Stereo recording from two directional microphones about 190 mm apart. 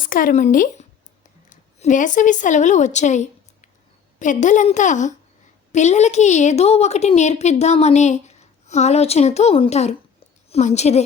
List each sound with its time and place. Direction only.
0.1 s a woman's voice: 45° left (ahead or behind)